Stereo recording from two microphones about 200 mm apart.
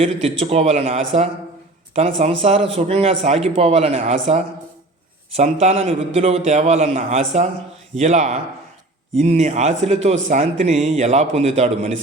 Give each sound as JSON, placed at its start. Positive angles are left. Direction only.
{"t": 0.0, "sound": "a man's voice", "side_deg": -30}